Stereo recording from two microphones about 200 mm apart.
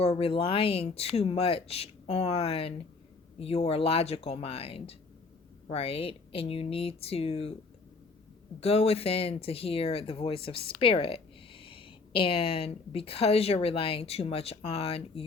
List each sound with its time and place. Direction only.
0.0 s speech: 30° left (ahead or behind)
8.6 s speech: 30° left (ahead or behind)